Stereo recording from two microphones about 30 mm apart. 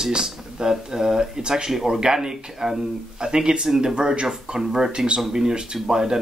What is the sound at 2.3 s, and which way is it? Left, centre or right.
Speech, centre.